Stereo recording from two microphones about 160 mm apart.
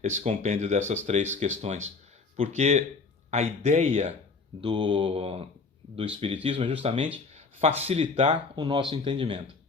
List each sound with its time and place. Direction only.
0.0 s speech: 45° right (ahead or behind)